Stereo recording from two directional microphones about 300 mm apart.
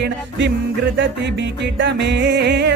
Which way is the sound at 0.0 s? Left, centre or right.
Right.